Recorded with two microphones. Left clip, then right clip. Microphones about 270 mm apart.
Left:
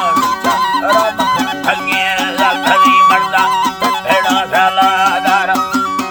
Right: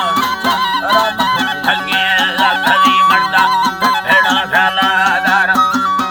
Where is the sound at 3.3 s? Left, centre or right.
Left.